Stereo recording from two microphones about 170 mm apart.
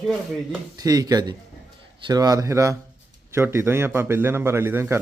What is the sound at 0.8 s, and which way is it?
A man's voice, 20° right (ahead or behind).